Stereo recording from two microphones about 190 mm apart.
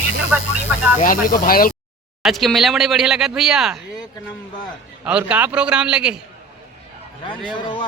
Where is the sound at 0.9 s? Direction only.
45° left (ahead or behind).